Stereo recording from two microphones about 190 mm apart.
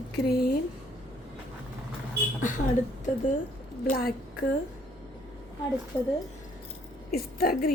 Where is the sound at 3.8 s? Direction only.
50° left (ahead or behind).